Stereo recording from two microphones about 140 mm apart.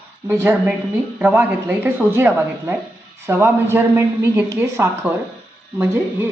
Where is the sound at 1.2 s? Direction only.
15° right (ahead or behind).